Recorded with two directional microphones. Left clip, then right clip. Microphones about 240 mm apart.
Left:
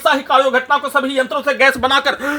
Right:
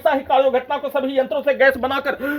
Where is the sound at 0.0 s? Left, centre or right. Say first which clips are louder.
Left 3 dB; left.